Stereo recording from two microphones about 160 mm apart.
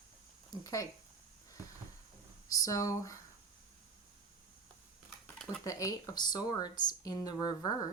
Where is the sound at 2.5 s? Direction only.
20° left (ahead or behind).